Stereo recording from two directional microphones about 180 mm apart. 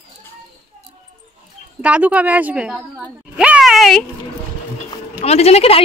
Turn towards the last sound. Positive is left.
turn(degrees=35)  # may be behind; listen again after turning